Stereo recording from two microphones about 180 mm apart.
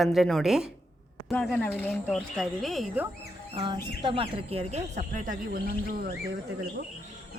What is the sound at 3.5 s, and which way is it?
Speech, 25° right (ahead or behind).